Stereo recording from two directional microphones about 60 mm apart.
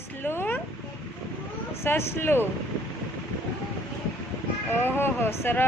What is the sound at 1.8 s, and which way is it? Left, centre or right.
Speech, left.